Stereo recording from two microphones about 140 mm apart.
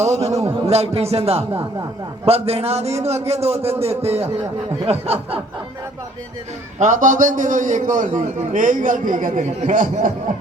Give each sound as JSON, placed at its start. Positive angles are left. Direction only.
{"t": 0.3, "sound": "a man's voice", "side_deg": -25}
{"t": 0.6, "sound": "a man's voice", "side_deg": -45}
{"t": 6.7, "sound": "a man's voice", "side_deg": -65}
{"t": 9.7, "sound": "a man's voice", "side_deg": -75}